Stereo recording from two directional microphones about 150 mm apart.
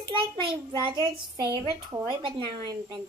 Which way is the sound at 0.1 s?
35° right (ahead or behind).